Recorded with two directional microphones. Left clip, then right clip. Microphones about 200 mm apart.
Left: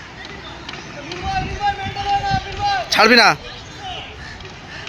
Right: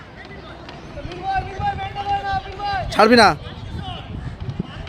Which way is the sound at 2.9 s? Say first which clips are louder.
Left 1 dB; 25° right (ahead or behind).